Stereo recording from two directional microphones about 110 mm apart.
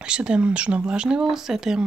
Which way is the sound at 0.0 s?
10° right (ahead or behind).